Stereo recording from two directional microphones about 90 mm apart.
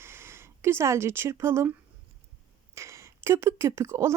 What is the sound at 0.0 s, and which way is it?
Speech, 30° right (ahead or behind).